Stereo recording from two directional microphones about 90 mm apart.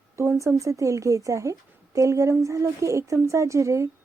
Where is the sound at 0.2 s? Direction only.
30° right (ahead or behind).